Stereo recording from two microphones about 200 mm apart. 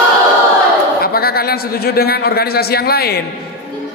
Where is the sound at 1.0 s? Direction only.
50° left (ahead or behind).